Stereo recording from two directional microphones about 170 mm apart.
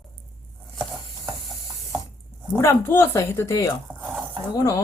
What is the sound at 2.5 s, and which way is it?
Speech, 15° left (ahead or behind).